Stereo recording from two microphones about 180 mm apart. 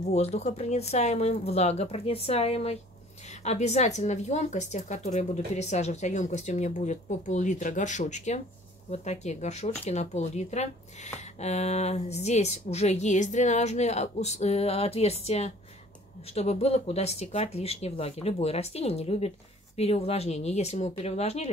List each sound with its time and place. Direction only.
0.1 s speech: 35° left (ahead or behind)